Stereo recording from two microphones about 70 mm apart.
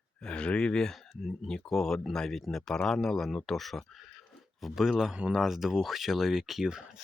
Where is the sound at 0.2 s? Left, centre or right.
Centre.